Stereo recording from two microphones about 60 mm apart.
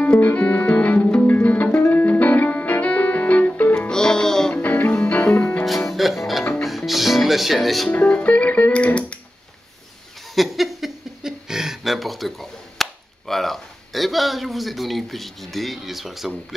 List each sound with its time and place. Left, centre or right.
0.0 s music: left
3.7 s music: centre
4.6 s music: left
5.7 s music: centre
8.1 s music: left
10.3 s a sound: centre
13.3 s speech: centre